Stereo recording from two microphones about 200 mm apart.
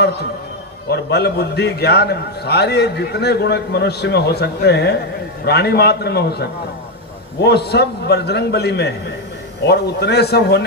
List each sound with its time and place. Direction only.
0.8 s a man's voice: 55° left (ahead or behind)